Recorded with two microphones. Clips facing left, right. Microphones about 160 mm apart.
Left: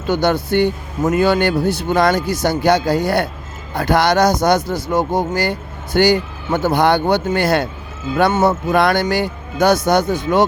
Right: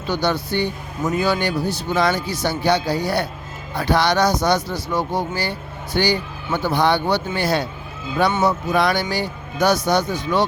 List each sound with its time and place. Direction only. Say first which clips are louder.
0.1 s speech: left 5 dB; 50° left (ahead or behind)